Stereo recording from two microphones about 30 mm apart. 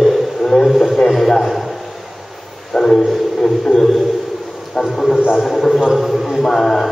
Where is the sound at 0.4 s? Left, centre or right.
Centre.